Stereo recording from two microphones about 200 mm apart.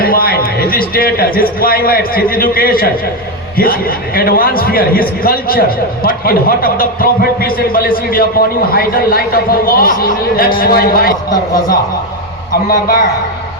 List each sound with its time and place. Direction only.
0.0 s a man's voice: 50° left (ahead or behind)